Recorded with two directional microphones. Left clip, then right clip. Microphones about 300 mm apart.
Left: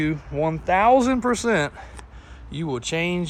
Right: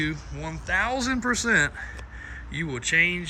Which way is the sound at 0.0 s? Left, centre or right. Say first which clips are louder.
Left 7 dB; centre.